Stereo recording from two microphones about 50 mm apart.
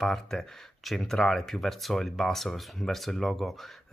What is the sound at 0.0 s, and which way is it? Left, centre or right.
Speech, centre.